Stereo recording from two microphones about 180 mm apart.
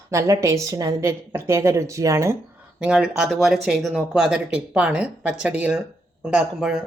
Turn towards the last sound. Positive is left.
turn(degrees=-5)  # may be behind; listen again after turning